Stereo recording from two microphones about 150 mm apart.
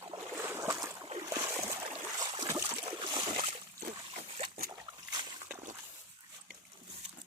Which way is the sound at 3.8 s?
55° right (ahead or behind).